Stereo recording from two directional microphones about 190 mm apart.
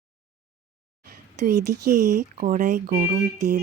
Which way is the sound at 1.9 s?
40° right (ahead or behind).